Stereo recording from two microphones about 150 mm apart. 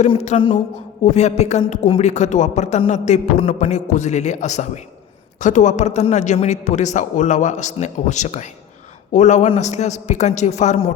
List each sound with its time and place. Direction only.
0.1 s a man's voice: 40° left (ahead or behind)